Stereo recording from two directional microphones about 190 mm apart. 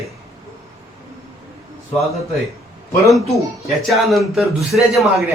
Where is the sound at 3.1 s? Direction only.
Centre (ahead or behind).